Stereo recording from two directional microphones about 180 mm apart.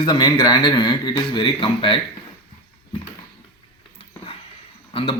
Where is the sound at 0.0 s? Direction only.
20° left (ahead or behind).